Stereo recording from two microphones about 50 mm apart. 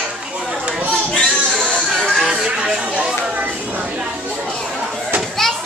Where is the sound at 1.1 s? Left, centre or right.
Centre.